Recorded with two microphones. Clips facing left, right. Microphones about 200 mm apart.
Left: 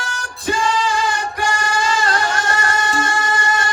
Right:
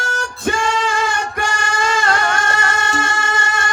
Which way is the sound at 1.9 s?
55° right (ahead or behind).